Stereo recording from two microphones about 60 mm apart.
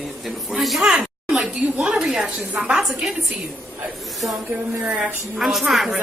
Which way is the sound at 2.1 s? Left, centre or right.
Centre.